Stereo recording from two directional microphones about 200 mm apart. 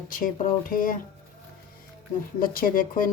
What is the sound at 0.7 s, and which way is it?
Speech, 45° left (ahead or behind).